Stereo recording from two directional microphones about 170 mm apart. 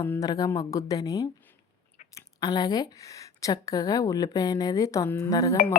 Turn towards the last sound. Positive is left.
turn(degrees=20)  # may be behind; listen again after turning